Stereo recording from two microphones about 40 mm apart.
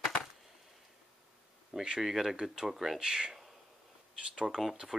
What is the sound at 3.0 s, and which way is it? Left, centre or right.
Speech, centre.